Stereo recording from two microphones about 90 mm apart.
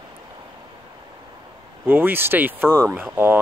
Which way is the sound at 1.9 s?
25° right (ahead or behind).